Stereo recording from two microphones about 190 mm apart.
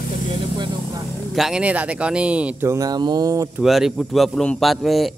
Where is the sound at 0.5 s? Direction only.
25° right (ahead or behind).